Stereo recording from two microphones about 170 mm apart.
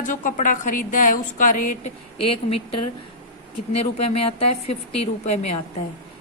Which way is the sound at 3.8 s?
35° left (ahead or behind).